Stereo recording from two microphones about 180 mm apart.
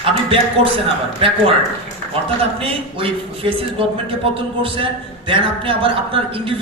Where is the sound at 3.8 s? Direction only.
30° right (ahead or behind).